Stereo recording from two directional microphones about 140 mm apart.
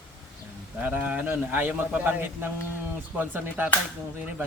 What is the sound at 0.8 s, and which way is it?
A man's voice, 10° right (ahead or behind).